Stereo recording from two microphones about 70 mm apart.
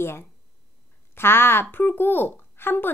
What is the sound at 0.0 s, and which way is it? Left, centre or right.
A woman's voice, left.